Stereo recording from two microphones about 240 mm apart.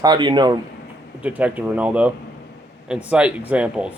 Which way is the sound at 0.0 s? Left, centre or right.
Centre.